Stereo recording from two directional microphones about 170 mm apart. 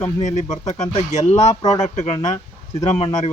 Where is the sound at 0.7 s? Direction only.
45° left (ahead or behind).